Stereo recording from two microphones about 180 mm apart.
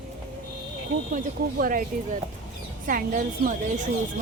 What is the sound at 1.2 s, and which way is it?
Speech, 50° right (ahead or behind).